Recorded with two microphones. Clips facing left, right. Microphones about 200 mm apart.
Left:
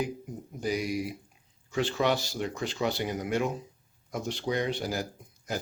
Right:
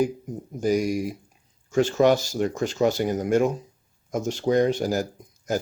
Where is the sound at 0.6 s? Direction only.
45° right (ahead or behind).